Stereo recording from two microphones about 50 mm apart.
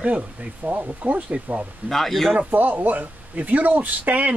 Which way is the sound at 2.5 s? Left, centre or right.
Right.